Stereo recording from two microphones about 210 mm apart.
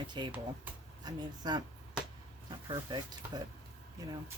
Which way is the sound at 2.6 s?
20° right (ahead or behind).